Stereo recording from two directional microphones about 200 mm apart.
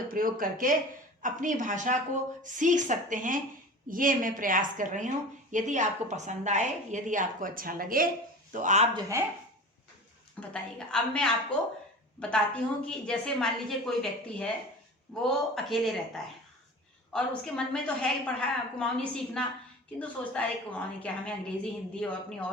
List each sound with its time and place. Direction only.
0.1 s a woman's voice: 45° right (ahead or behind)
10.5 s a woman's voice: 5° left (ahead or behind)
12.3 s a woman's voice: 5° left (ahead or behind)